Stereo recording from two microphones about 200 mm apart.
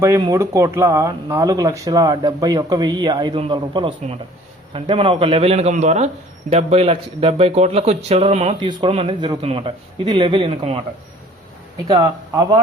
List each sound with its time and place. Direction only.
0.0 s a man's voice: 15° right (ahead or behind); by 10.8 s 30° right (ahead or behind)
11.9 s speech: 20° right (ahead or behind)